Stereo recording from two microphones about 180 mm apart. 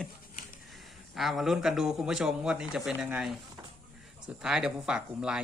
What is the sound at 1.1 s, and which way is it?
Speech, centre (ahead or behind).